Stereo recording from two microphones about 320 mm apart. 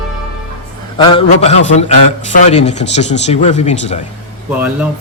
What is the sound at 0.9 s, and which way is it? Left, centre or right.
Speech, centre.